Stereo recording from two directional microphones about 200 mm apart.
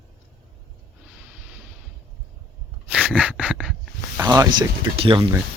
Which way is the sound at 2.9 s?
5° right (ahead or behind).